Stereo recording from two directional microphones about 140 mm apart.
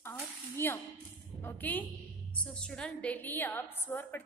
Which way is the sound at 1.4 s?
10° left (ahead or behind).